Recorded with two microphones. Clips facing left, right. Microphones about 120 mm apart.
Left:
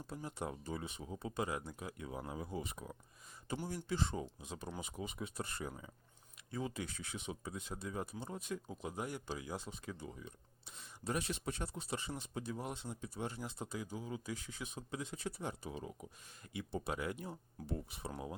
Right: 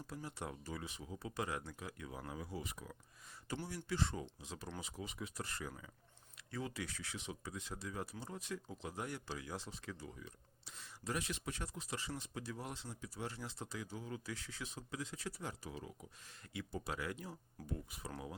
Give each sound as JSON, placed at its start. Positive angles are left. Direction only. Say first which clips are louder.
{"t": 0.1, "sound": "speech", "louder": "left 4 dB", "side_deg": 20}